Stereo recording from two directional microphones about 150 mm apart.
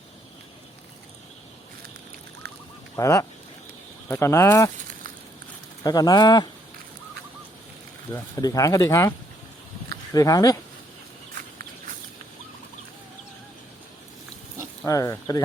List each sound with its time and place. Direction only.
2.9 s speech: 20° left (ahead or behind)
5.8 s speech: 25° left (ahead or behind)
8.1 s speech: 25° left (ahead or behind)
14.8 s speech: 20° left (ahead or behind)